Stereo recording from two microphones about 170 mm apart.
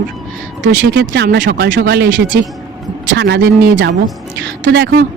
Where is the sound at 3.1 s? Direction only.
80° right.